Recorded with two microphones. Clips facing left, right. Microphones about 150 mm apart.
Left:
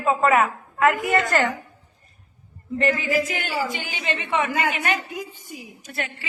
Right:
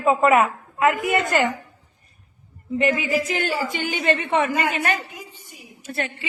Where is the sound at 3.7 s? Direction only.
55° right (ahead or behind); by 6.2 s 30° right (ahead or behind).